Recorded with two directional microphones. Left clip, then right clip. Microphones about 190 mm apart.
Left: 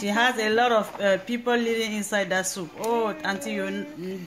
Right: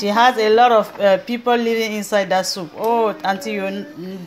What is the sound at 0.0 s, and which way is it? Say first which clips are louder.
Speech: right 9 dB; 10° right (ahead or behind).